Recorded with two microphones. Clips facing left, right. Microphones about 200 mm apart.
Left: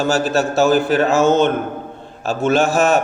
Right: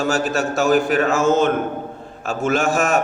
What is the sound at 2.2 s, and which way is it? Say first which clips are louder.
Speech: left 3 dB; 35° left (ahead or behind).